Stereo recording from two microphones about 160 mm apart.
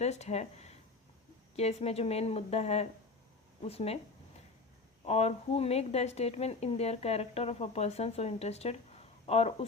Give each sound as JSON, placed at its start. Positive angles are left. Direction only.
{"t": 0.0, "sound": "a woman's voice", "side_deg": 45}
{"t": 5.0, "sound": "a woman's voice", "side_deg": 40}